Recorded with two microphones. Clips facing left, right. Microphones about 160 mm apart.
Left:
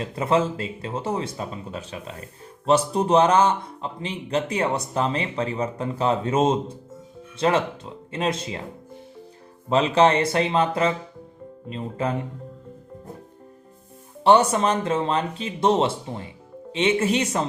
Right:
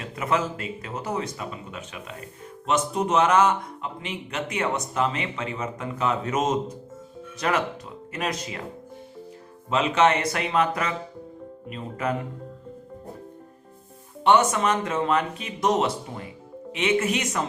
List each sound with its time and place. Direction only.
0.0 s speech: 30° left (ahead or behind)
9.6 s speech: 35° left (ahead or behind)
11.7 s speech: 30° left (ahead or behind)
14.3 s speech: 30° left (ahead or behind)